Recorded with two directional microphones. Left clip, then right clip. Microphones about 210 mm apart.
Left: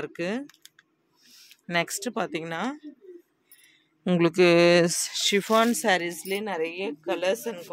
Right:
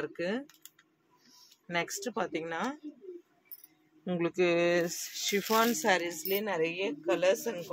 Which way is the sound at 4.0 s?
55° left (ahead or behind).